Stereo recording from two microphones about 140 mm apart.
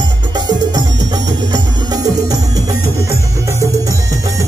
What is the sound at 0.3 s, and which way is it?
Music, 30° right (ahead or behind).